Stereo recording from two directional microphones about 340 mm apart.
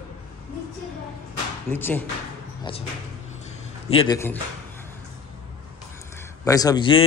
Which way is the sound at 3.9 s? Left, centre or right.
Centre.